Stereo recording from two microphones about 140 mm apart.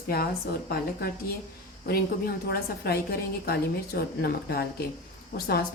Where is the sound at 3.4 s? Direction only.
90° left.